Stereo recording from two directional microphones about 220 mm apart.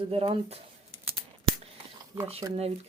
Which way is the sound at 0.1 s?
25° right (ahead or behind).